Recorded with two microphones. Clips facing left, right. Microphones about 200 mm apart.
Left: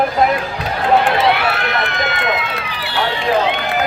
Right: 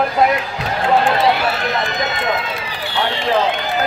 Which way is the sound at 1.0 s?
60° left (ahead or behind).